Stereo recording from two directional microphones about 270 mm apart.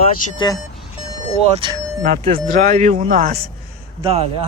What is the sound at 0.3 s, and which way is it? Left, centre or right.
Speech, centre.